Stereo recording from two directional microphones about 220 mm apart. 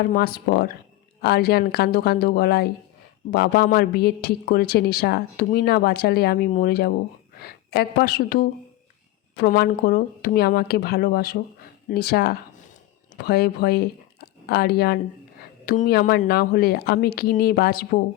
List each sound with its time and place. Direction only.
0.1 s a woman's voice: 40° left (ahead or behind)